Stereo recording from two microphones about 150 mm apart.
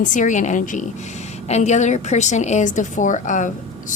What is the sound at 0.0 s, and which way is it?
A woman's voice, 55° left (ahead or behind).